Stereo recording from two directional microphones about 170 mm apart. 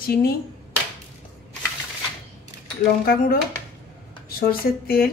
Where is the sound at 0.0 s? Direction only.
60° left (ahead or behind).